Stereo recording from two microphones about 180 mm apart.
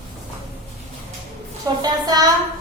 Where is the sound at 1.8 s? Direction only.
20° right (ahead or behind).